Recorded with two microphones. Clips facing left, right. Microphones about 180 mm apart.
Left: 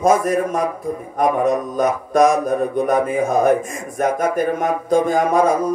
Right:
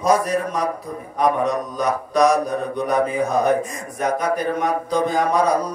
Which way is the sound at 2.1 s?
50° left (ahead or behind).